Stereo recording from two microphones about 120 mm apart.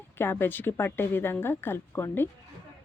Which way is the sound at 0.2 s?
20° left (ahead or behind).